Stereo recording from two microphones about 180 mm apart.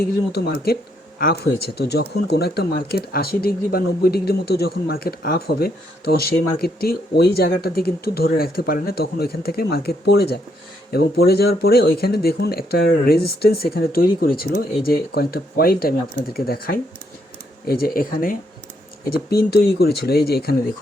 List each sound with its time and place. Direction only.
0.0 s speech: 60° left (ahead or behind)